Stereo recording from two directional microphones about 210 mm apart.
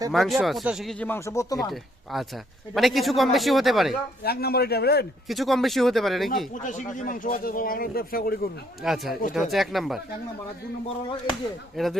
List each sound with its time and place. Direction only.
0.1 s speech: centre (ahead or behind)
2.1 s speech: centre (ahead or behind)
4.2 s speech: 50° left (ahead or behind)
5.3 s speech: centre (ahead or behind)
6.5 s speech: 40° left (ahead or behind)
8.8 s speech: centre (ahead or behind)
11.8 s speech: centre (ahead or behind)